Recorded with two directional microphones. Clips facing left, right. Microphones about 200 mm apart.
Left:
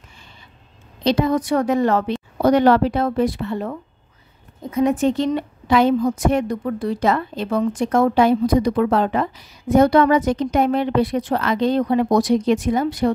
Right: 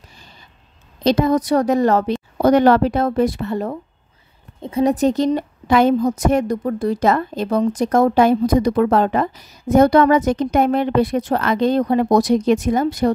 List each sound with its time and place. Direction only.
1.0 s a woman's voice: 45° right (ahead or behind)
4.6 s a woman's voice: 30° right (ahead or behind)